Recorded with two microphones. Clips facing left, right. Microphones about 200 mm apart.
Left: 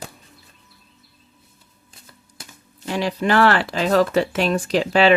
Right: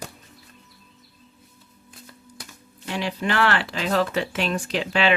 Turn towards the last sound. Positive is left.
turn(degrees=40)  # may be behind; listen again after turning